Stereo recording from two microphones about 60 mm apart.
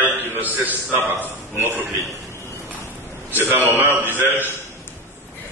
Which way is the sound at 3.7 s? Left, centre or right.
Right.